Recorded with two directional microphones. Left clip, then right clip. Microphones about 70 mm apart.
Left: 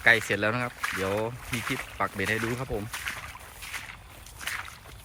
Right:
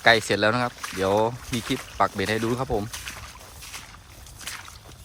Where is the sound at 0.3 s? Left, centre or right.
Right.